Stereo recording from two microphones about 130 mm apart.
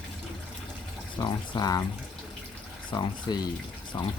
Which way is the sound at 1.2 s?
30° left (ahead or behind).